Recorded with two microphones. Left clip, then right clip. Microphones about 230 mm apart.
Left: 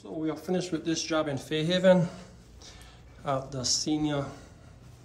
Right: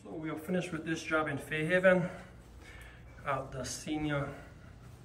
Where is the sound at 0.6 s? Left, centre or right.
Centre.